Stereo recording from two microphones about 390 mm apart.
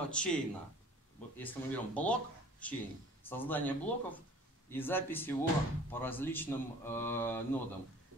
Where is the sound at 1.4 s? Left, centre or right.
Centre.